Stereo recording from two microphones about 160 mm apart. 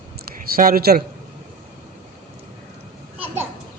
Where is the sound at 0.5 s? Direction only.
70° right (ahead or behind).